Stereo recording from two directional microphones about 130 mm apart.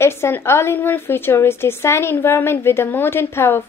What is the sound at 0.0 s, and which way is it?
A woman's voice, 20° left (ahead or behind).